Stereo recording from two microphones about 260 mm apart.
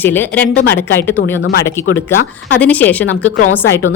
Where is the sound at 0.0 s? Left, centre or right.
Centre.